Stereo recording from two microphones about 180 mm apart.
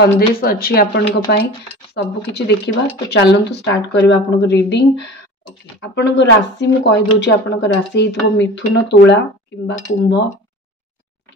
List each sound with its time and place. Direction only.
0.0 s speech: 55° left (ahead or behind)
2.3 s speech: 65° left (ahead or behind)